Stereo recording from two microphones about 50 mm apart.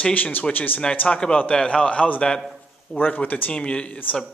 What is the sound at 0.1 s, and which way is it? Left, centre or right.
Speech, left.